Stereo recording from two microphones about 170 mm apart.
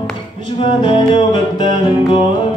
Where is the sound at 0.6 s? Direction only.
30° left (ahead or behind).